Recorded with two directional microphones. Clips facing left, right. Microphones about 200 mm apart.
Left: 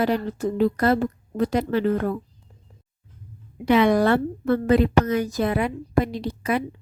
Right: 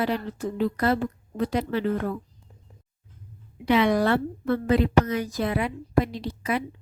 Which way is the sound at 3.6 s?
50° left (ahead or behind).